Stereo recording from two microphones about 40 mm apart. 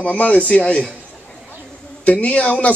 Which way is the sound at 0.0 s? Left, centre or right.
Left.